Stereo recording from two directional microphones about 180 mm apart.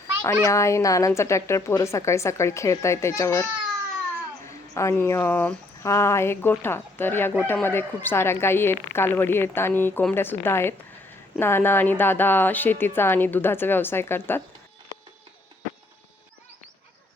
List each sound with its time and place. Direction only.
0.4 s a woman's voice: 15° left (ahead or behind)